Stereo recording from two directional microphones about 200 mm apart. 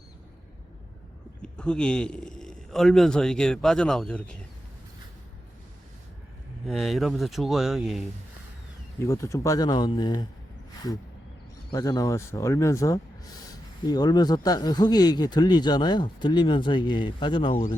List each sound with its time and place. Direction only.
1.4 s speech: 5° left (ahead or behind)
6.7 s speech: centre (ahead or behind)
9.0 s speech: 15° left (ahead or behind)
11.7 s speech: 20° left (ahead or behind)